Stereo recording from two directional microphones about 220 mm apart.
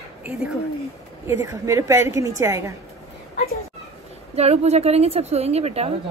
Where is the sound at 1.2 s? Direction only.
15° right (ahead or behind).